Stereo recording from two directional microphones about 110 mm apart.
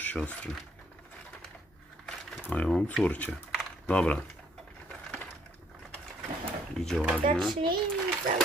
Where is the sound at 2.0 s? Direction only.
10° left (ahead or behind).